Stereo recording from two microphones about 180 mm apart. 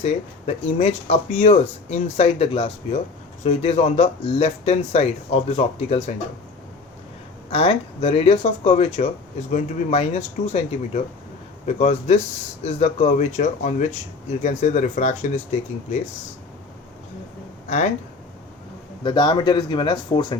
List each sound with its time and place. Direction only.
0.0 s speech: 35° left (ahead or behind)
7.5 s speech: 30° left (ahead or behind)
19.0 s speech: 25° left (ahead or behind)